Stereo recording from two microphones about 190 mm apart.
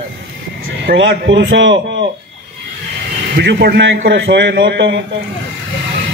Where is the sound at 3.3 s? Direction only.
65° right (ahead or behind).